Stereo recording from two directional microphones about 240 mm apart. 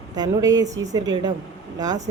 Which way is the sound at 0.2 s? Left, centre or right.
Centre.